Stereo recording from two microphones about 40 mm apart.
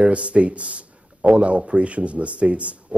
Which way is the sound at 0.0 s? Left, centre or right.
Right.